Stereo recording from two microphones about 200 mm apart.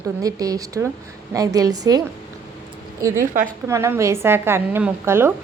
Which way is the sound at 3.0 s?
15° right (ahead or behind).